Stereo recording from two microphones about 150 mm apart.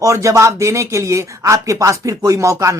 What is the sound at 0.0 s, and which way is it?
A woman's voice, 20° right (ahead or behind).